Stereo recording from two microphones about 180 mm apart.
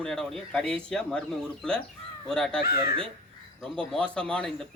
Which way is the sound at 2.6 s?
60° left (ahead or behind).